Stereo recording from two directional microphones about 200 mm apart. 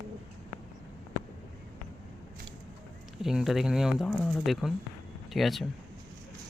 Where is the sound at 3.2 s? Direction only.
Centre (ahead or behind).